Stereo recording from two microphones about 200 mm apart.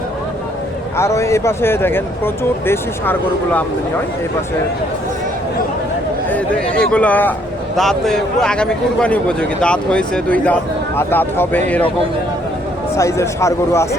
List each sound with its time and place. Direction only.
0.9 s speech: 15° left (ahead or behind)
6.2 s a man's voice: 5° left (ahead or behind)
13.0 s speech: 15° left (ahead or behind)